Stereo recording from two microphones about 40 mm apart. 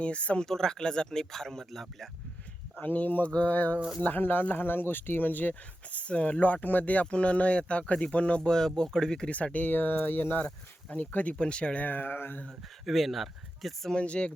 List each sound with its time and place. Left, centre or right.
0.0 s speech: left
0.4 s speech: centre
2.8 s speech: left
3.2 s speech: left
3.5 s speech: left
6.0 s speech: left
9.3 s speech: left
10.9 s speech: left
11.3 s speech: left
11.9 s speech: left
12.5 s speech: centre
13.9 s speech: left